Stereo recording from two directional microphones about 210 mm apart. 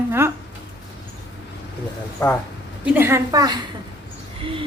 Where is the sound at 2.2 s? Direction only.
15° left (ahead or behind).